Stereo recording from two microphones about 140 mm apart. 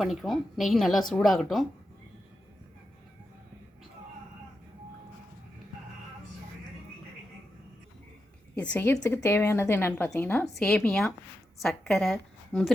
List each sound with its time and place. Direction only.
0.0 s a woman's voice: centre (ahead or behind)
8.5 s a woman's voice: 10° left (ahead or behind)
10.4 s a woman's voice: 5° left (ahead or behind)